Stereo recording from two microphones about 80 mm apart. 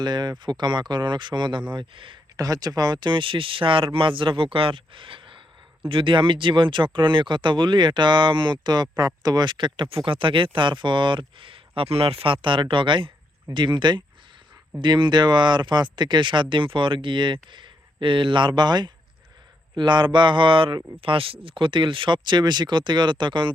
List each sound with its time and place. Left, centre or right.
0.0 s a man's voice: right
2.3 s a man's voice: right